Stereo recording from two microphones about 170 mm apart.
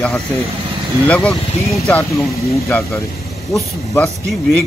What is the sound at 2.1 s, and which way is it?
Speech, 15° left (ahead or behind).